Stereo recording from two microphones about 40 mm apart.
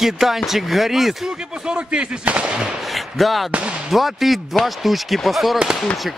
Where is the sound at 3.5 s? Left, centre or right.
Right.